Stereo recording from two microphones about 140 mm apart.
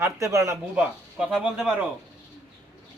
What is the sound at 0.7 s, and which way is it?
Speech, 5° right (ahead or behind).